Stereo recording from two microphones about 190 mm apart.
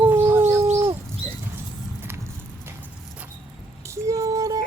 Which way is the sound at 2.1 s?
10° right (ahead or behind).